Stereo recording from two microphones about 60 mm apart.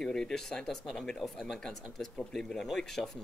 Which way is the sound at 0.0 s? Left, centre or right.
Centre.